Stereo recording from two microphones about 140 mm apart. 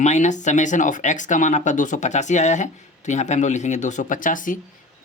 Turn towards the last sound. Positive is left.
turn(degrees=70)  # may be behind; listen again after turning